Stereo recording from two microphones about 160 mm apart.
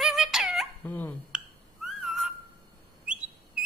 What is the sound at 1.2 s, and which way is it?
Whistling, 5° right (ahead or behind).